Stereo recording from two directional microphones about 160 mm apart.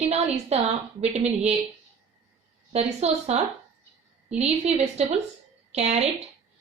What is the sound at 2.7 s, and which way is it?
Speech, 40° right (ahead or behind).